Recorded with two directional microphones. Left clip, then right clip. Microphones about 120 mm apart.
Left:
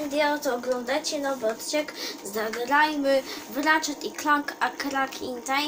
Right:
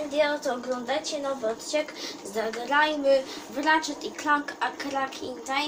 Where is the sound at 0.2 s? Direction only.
60° left (ahead or behind).